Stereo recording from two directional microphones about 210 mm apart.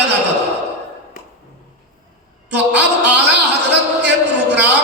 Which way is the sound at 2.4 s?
55° right (ahead or behind).